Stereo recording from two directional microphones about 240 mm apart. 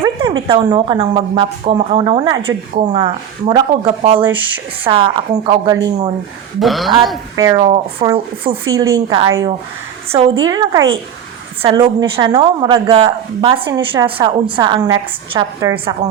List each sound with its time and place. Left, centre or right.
0.0 s a sound: centre
0.4 s a woman's voice: right
4.2 s speech: centre
4.8 s a woman's voice: right
6.6 s speech: centre
7.3 s speech: centre
10.4 s a woman's voice: centre